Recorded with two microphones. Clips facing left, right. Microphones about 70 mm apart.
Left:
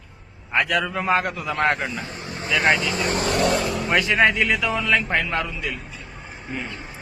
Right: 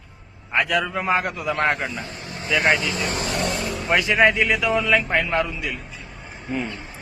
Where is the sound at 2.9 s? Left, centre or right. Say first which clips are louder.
Left 3 dB; left.